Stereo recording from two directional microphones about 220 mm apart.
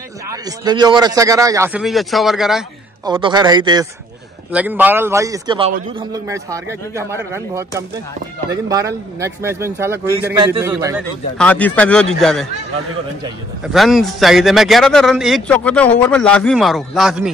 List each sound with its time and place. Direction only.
0.3 s a man's voice: 15° right (ahead or behind)
1.8 s speech: centre (ahead or behind)
3.1 s a man's voice: 20° right (ahead or behind)
4.5 s a man's voice: 5° right (ahead or behind)
11.3 s speech: 5° left (ahead or behind)
13.7 s speech: centre (ahead or behind)